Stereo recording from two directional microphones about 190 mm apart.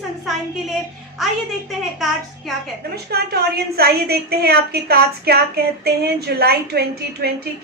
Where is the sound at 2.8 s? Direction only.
55° right (ahead or behind).